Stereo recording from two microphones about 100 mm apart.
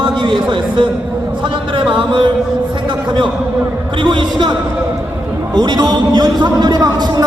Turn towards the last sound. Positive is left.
turn(degrees=-40)  # may be behind; listen again after turning